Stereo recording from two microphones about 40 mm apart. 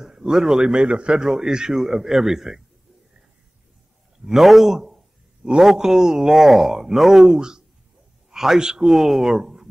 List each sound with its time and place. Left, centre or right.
0.0 s speech: centre
4.3 s speech: centre
7.3 s a man's voice: centre